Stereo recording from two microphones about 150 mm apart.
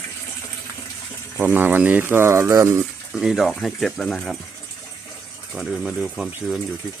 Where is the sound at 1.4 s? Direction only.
15° right (ahead or behind).